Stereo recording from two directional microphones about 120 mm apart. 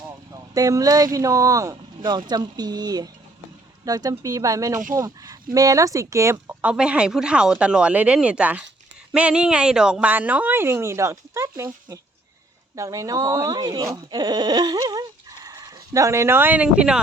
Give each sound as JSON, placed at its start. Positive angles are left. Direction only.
{"t": 0.5, "sound": "speech", "side_deg": -30}
{"t": 6.5, "sound": "a woman's voice", "side_deg": -10}